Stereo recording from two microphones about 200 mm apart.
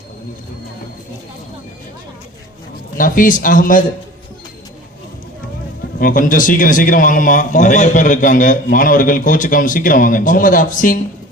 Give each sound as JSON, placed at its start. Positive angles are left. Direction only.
{"t": 3.0, "sound": "a man's voice", "side_deg": 40}
{"t": 6.0, "sound": "a man's voice", "side_deg": 45}